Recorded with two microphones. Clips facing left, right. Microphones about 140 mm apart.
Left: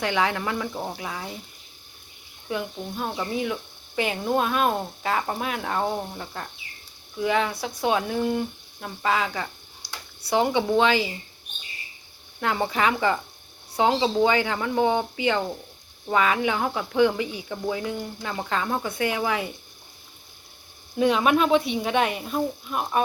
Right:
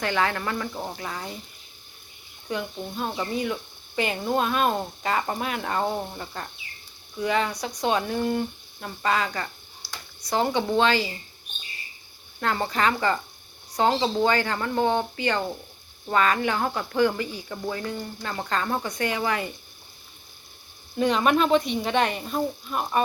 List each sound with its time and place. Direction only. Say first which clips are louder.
0.0 s speech: left 1 dB; 15° left (ahead or behind)
2.5 s speech: left 1 dB; centre (ahead or behind)
9.8 s a sound: left 1 dB; 15° left (ahead or behind)
10.2 s speech: left 2 dB; 10° left (ahead or behind)
12.4 s speech: left 1 dB; 10° left (ahead or behind)
20.9 s speech: left 1 dB; 5° left (ahead or behind)